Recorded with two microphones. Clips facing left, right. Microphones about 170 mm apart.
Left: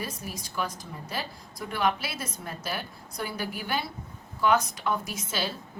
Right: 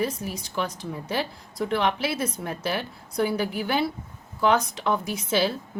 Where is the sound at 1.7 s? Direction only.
60° right (ahead or behind).